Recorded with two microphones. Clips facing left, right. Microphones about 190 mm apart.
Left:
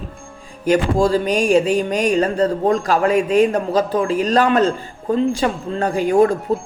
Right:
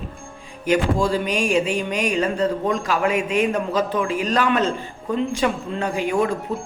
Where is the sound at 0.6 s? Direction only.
35° left (ahead or behind).